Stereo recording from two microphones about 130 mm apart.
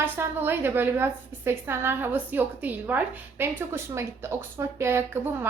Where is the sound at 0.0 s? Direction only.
15° right (ahead or behind).